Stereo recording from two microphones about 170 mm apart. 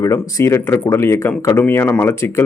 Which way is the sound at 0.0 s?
15° left (ahead or behind).